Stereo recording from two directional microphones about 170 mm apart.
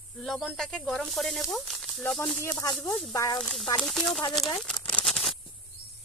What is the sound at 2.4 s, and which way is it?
Speech, 15° left (ahead or behind).